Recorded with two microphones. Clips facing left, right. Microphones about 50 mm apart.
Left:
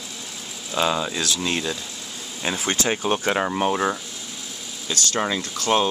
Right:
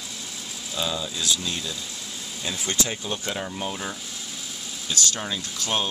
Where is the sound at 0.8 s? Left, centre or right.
Left.